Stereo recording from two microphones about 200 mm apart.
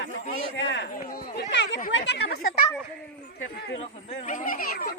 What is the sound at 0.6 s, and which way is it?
Speech, 65° left (ahead or behind).